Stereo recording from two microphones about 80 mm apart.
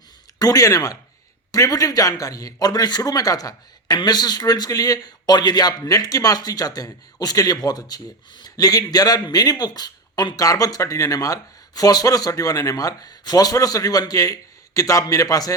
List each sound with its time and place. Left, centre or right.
0.3 s a man's voice: left